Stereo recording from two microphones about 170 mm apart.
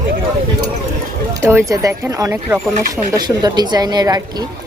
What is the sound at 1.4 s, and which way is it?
A woman's voice, 15° right (ahead or behind).